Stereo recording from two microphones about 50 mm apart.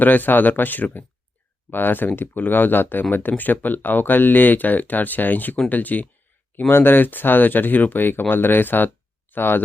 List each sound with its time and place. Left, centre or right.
0.0 s speech: left
6.7 s speech: left